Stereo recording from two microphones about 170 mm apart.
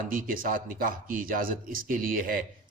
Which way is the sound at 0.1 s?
55° right (ahead or behind).